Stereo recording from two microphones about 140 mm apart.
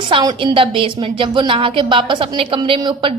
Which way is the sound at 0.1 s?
35° right (ahead or behind).